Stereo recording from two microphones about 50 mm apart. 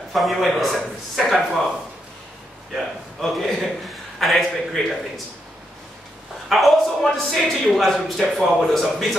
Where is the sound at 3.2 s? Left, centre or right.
Centre.